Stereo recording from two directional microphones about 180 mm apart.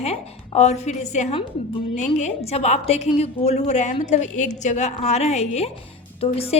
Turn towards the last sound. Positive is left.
turn(degrees=35)  # may be behind; listen again after turning